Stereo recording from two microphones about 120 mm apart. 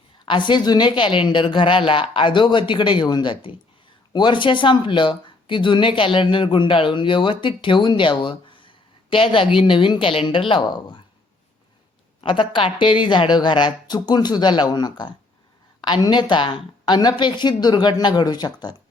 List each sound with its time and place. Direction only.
0.3 s a woman's voice: 40° left (ahead or behind)
12.2 s a woman's voice: 45° left (ahead or behind)